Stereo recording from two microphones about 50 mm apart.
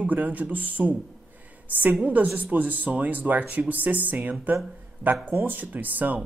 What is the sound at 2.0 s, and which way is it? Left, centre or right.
Speech, right.